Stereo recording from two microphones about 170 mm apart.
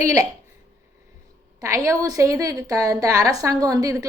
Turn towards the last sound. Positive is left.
turn(degrees=-20)  # may be behind; listen again after turning